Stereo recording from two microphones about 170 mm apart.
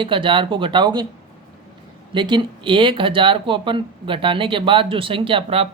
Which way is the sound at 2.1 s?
25° right (ahead or behind).